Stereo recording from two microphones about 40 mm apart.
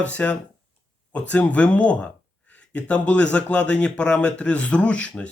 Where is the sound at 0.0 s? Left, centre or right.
Left.